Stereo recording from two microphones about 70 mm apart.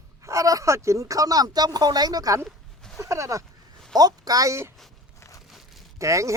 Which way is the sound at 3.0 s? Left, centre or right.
Right.